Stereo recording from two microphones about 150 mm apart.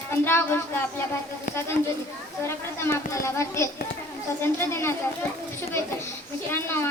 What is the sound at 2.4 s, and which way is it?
A child's voice, 15° left (ahead or behind).